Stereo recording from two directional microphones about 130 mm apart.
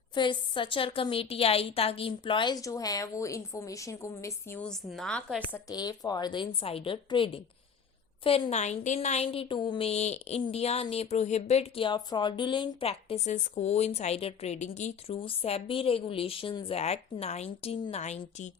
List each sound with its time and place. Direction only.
0.1 s a woman's voice: 35° left (ahead or behind); by 4.6 s 20° left (ahead or behind)
4.6 s a woman's voice: 5° left (ahead or behind)
5.6 s a woman's voice: 30° left (ahead or behind)
8.2 s a woman's voice: 50° left (ahead or behind)
11.9 s speech: 35° left (ahead or behind); by 15.1 s 60° left (ahead or behind)
15.1 s a woman's voice: 45° left (ahead or behind); by 18.5 s 65° left (ahead or behind)